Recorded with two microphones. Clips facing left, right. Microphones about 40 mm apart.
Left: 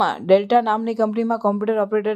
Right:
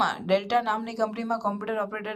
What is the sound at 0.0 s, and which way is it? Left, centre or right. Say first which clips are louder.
Speech: left 8 dB; left.